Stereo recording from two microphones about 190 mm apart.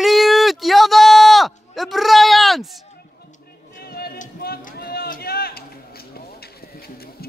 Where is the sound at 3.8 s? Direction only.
55° left (ahead or behind).